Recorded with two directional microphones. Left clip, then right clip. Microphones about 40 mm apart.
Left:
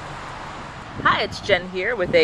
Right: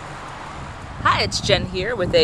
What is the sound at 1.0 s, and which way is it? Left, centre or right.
Speech, right.